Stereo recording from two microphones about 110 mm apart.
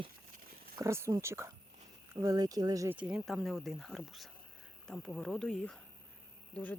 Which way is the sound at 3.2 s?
Centre (ahead or behind).